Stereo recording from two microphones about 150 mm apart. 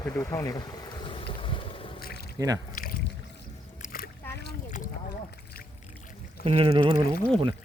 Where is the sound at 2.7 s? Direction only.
70° left (ahead or behind).